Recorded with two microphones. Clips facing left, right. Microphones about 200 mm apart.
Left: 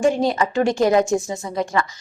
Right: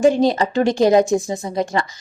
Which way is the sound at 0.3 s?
35° right (ahead or behind).